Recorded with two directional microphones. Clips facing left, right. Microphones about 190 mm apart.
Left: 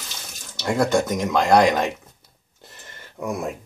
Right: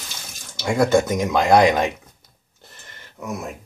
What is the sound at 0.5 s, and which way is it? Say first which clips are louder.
Speech: right 3 dB; centre (ahead or behind).